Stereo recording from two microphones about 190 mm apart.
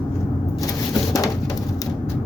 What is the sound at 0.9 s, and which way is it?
Bird, 20° left (ahead or behind).